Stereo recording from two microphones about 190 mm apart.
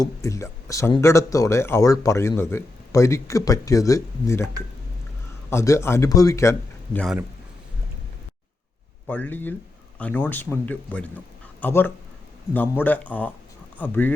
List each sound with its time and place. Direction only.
0.0 s speech: 15° left (ahead or behind)
5.5 s speech: 15° left (ahead or behind)
9.0 s speech: 10° left (ahead or behind)